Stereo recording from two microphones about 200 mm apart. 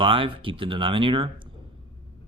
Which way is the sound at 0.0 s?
25° right (ahead or behind).